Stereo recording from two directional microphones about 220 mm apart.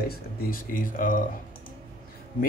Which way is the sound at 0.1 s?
40° left (ahead or behind).